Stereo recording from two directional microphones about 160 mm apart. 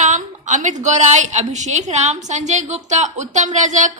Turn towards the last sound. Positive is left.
turn(degrees=-50)  # may be behind; listen again after turning